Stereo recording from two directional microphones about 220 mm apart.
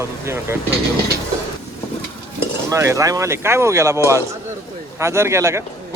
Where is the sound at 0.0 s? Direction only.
10° right (ahead or behind).